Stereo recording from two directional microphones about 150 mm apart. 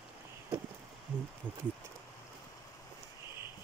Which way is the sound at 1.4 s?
10° right (ahead or behind).